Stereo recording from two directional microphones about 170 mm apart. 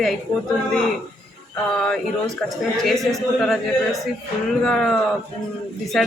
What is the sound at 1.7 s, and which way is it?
A man's voice, 5° left (ahead or behind).